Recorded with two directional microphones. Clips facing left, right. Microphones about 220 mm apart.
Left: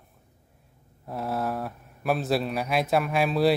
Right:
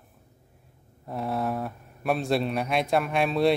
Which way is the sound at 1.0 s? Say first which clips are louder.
Right 1 dB; centre (ahead or behind).